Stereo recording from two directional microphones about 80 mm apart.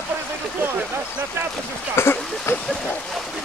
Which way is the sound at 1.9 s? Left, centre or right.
Left.